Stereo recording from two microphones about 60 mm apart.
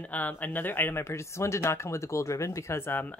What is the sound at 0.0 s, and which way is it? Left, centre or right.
Speech, left.